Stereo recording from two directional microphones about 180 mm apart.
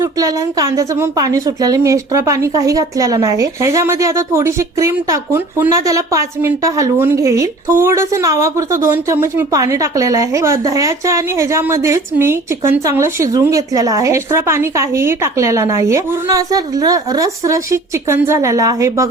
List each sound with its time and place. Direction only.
0.0 s speech: 20° right (ahead or behind)